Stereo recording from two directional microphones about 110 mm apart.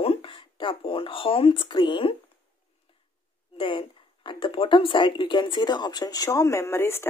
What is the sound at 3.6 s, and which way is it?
Speech, 55° left (ahead or behind).